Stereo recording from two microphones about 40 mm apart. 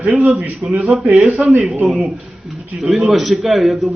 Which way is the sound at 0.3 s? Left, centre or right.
Right.